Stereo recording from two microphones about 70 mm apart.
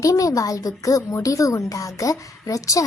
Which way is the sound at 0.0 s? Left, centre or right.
Left.